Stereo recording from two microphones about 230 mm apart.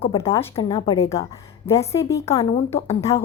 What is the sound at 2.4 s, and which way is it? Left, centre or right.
Speech, left.